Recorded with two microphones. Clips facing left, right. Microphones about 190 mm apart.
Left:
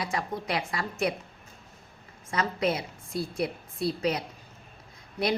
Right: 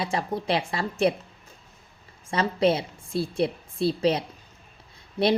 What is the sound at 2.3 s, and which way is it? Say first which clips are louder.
A woman's voice: right 5 dB; 30° right (ahead or behind).